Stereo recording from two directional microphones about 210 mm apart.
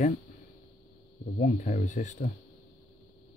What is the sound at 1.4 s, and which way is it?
Speech, 35° left (ahead or behind).